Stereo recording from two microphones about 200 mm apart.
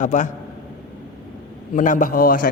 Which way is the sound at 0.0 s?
40° left (ahead or behind).